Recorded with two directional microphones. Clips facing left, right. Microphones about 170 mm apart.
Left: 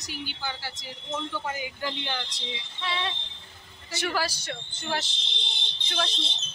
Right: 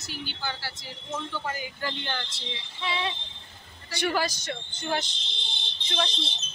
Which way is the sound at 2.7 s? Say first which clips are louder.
Right 2 dB; 5° right (ahead or behind).